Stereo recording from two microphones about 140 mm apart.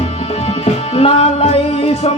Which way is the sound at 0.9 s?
45° left (ahead or behind).